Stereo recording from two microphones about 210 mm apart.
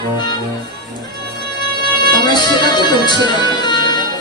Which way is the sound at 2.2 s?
20° left (ahead or behind).